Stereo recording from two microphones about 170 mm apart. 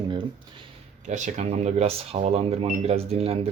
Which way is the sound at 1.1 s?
45° right (ahead or behind).